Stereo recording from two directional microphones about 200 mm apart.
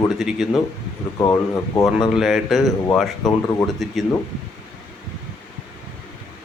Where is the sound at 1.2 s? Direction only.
15° left (ahead or behind).